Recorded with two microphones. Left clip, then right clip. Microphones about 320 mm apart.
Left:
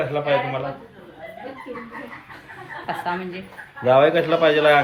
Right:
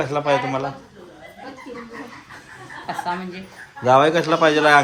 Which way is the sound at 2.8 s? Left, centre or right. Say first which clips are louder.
Even; centre.